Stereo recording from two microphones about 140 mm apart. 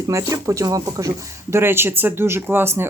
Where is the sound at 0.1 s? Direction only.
20° right (ahead or behind).